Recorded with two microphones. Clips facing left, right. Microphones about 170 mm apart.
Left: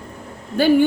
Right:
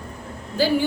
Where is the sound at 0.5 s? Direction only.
60° left (ahead or behind).